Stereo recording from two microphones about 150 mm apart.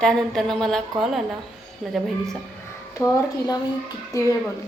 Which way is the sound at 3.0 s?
20° left (ahead or behind).